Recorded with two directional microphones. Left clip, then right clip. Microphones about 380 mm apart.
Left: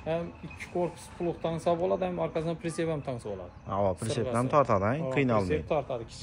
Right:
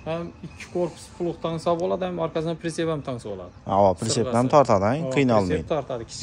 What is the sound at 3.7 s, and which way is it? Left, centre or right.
Speech, centre.